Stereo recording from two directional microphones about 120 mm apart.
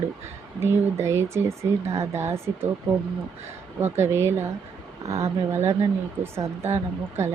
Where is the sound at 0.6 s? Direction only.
20° right (ahead or behind).